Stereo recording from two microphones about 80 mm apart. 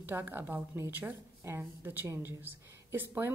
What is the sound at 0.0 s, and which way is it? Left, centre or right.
A woman's voice, right.